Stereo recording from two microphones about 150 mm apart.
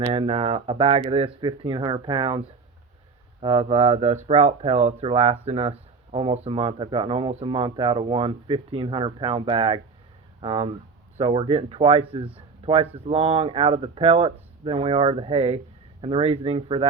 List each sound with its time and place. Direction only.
0.1 s speech: 40° right (ahead or behind)
3.4 s speech: 35° right (ahead or behind)